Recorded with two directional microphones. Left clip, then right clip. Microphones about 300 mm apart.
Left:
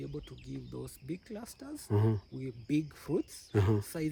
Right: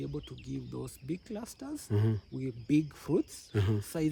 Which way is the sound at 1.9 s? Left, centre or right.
Centre.